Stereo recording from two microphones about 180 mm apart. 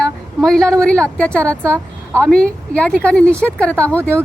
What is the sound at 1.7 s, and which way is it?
Speech, 15° right (ahead or behind).